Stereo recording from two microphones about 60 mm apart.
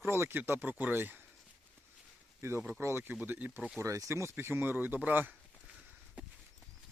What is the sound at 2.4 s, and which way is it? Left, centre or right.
Speech, right.